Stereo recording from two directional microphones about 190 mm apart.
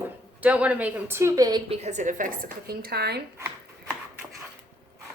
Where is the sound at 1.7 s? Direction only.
35° right (ahead or behind); by 3.2 s 60° right (ahead or behind).